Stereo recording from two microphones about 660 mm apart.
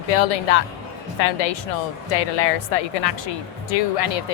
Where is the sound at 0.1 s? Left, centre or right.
Left.